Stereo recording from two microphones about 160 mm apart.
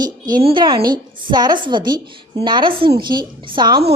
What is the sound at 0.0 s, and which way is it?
A woman's voice, 25° right (ahead or behind).